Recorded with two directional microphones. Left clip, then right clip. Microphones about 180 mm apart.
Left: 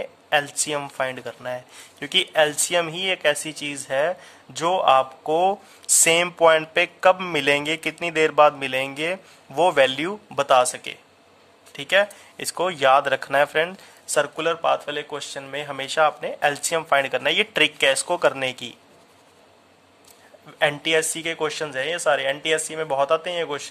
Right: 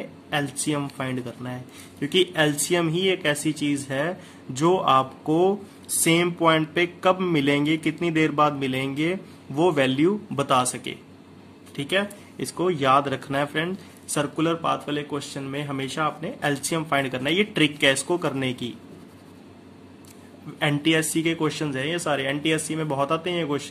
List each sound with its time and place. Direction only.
0.0 s speech: 40° left (ahead or behind)
20.5 s speech: 35° left (ahead or behind)